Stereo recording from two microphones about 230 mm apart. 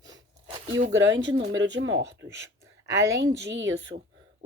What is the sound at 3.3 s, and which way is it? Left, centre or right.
Speech, right.